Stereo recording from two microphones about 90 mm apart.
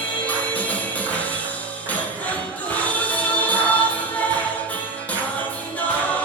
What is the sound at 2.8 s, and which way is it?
Music, 15° left (ahead or behind).